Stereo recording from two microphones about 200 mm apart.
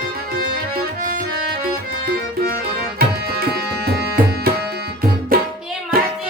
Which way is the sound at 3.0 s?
50° right (ahead or behind).